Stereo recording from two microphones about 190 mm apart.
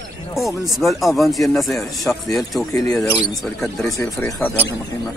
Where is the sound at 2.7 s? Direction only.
15° left (ahead or behind).